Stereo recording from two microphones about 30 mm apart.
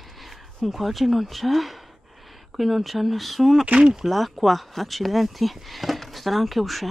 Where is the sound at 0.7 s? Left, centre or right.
Centre.